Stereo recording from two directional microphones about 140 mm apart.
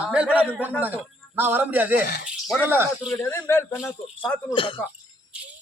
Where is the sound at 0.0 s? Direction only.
10° right (ahead or behind).